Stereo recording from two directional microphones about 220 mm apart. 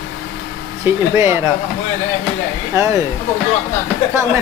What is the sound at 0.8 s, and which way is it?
Speech, 10° right (ahead or behind).